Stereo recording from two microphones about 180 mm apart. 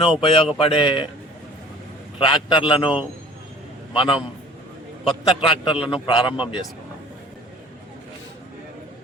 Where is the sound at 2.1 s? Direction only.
25° left (ahead or behind).